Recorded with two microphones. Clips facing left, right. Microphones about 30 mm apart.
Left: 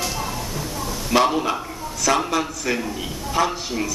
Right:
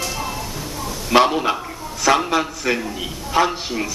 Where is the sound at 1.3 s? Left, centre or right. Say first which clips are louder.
Right 2 dB; centre.